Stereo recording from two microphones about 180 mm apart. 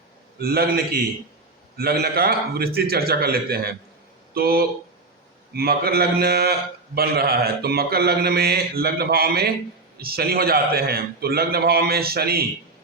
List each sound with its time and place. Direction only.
0.3 s a man's voice: 60° right (ahead or behind)